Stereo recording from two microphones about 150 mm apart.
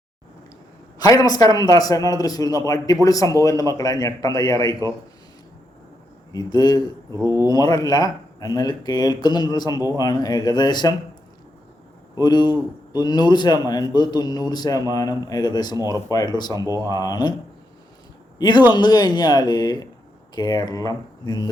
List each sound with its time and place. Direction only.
0.9 s a man's voice: 25° left (ahead or behind)
4.8 s speech: 20° right (ahead or behind)
6.3 s a man's voice: 25° left (ahead or behind)
7.2 s speech: 20° right (ahead or behind)
7.4 s a man's voice: 25° left (ahead or behind)
12.2 s a man's voice: 30° left (ahead or behind)
15.7 s speech: 25° right (ahead or behind)
16.0 s a man's voice: 25° left (ahead or behind)
16.6 s speech: 20° right (ahead or behind)
16.9 s a man's voice: 25° left (ahead or behind)
18.3 s a man's voice: 30° left (ahead or behind)